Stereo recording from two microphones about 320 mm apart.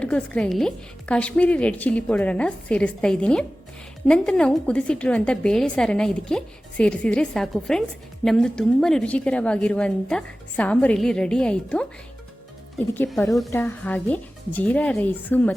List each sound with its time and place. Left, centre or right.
0.0 s a woman's voice: centre
12.9 s a woman's voice: centre